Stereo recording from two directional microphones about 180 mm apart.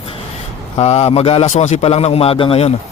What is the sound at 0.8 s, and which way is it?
A man's voice, 35° left (ahead or behind).